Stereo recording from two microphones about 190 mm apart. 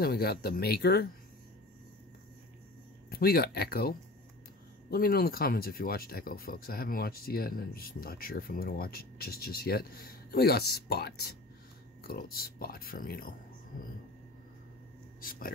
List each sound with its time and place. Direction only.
0.0 s speech: 55° left (ahead or behind)
3.1 s speech: 55° left (ahead or behind)
4.9 s speech: 50° left (ahead or behind)
15.1 s speech: 50° left (ahead or behind)